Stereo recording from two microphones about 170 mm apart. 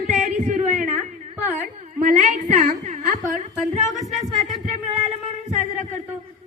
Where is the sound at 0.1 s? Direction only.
40° right (ahead or behind).